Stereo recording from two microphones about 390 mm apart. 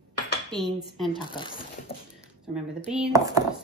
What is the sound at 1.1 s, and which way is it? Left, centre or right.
Speech, centre.